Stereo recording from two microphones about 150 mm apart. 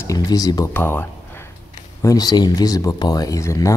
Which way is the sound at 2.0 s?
25° left (ahead or behind).